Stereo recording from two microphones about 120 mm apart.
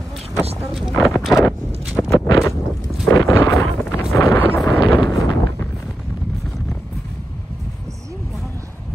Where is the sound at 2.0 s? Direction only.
5° left (ahead or behind).